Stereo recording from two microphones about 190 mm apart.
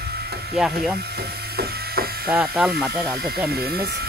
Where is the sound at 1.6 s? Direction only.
55° right (ahead or behind).